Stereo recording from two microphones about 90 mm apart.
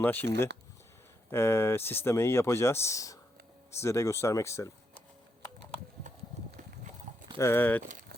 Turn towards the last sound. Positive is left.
turn(degrees=30)  # may be behind; listen again after turning